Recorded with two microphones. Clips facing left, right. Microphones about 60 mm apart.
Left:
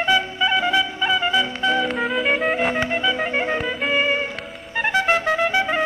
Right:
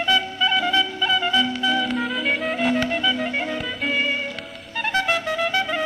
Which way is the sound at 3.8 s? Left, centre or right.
Left.